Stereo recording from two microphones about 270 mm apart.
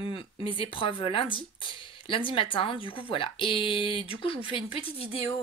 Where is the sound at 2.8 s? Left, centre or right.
Centre.